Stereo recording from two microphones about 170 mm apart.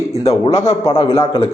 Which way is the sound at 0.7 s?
35° left (ahead or behind).